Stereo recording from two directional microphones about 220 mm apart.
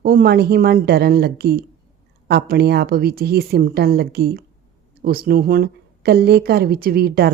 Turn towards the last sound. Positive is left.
turn(degrees=-45)  # may be behind; listen again after turning